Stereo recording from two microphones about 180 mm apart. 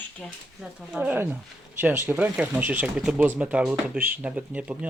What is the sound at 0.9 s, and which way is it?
Speech, 5° right (ahead or behind).